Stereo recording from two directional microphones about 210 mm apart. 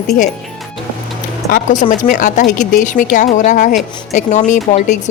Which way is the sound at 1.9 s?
35° left (ahead or behind).